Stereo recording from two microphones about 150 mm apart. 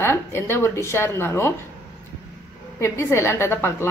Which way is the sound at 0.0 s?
15° left (ahead or behind).